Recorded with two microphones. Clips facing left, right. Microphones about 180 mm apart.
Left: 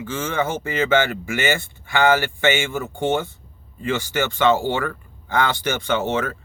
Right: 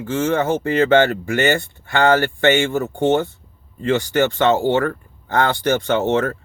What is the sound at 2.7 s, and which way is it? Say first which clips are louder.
Speech: right 5 dB; 40° right (ahead or behind).